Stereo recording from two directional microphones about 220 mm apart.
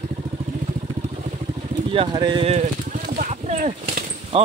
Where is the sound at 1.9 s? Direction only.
20° right (ahead or behind).